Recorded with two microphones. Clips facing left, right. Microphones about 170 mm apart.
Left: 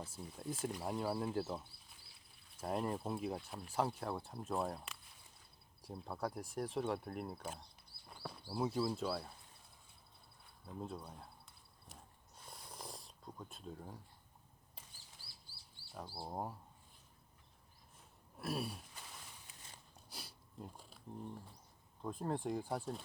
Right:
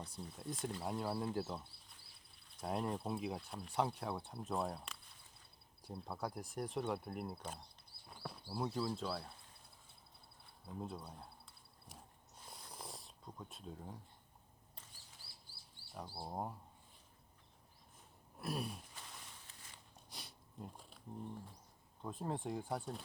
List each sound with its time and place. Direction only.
0.0 s speech: 5° left (ahead or behind)
10.7 s speech: centre (ahead or behind)
12.4 s a sound: centre (ahead or behind)
16.0 s speech: centre (ahead or behind)
18.3 s a sound: centre (ahead or behind)
20.1 s sniff: centre (ahead or behind)
22.0 s speech: centre (ahead or behind)